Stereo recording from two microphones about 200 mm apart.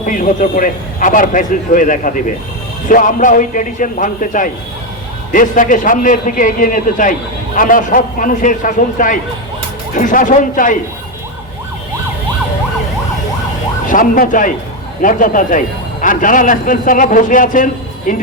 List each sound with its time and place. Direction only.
0.0 s a man's voice: 40° left (ahead or behind)
13.8 s a man's voice: 45° left (ahead or behind)